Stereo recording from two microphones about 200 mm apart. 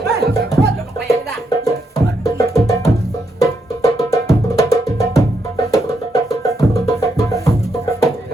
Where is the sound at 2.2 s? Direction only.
15° left (ahead or behind).